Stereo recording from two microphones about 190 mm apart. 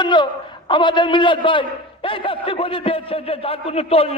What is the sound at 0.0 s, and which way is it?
A man's voice, 25° left (ahead or behind).